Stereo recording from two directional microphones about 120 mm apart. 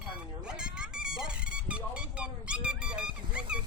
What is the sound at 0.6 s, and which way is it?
Dog, 5° right (ahead or behind).